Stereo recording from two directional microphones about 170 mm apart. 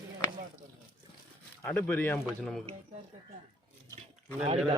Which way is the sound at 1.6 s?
10° left (ahead or behind).